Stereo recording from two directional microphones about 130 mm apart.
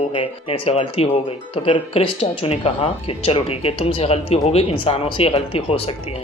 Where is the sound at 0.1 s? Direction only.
45° left (ahead or behind).